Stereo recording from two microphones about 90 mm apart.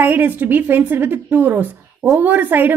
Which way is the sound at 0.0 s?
20° right (ahead or behind).